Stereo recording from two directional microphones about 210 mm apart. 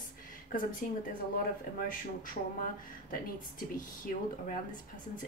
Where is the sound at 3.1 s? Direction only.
40° left (ahead or behind).